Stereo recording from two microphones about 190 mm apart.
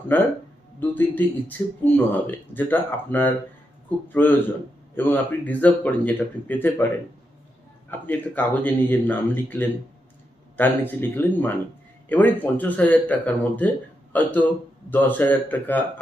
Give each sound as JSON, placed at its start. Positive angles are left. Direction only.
{"t": 0.1, "sound": "speech", "side_deg": 10}
{"t": 7.9, "sound": "speech", "side_deg": 10}